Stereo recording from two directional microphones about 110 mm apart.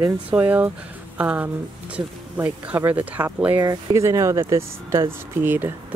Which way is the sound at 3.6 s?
35° right (ahead or behind).